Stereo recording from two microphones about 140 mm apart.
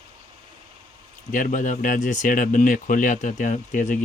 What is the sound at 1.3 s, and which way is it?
Speech, 70° left (ahead or behind).